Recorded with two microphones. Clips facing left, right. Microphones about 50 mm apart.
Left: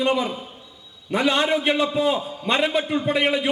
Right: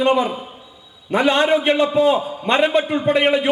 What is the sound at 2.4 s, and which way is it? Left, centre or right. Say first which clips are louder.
A man's voice: right 5 dB; centre.